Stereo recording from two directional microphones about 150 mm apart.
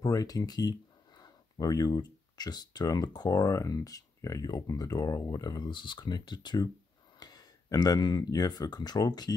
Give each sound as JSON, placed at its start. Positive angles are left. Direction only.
{"t": 0.0, "sound": "speech", "side_deg": 25}